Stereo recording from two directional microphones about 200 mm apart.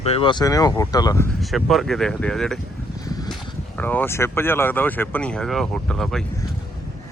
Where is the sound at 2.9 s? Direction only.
20° left (ahead or behind).